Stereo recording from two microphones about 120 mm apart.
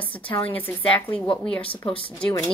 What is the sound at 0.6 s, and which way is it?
Speech, 15° left (ahead or behind).